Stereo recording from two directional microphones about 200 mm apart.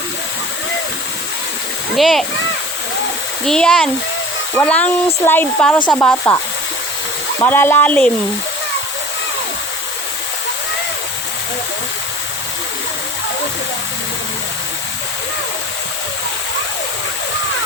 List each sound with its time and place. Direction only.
2.0 s speech: centre (ahead or behind)
3.4 s speech: 5° left (ahead or behind)
7.4 s speech: 10° left (ahead or behind)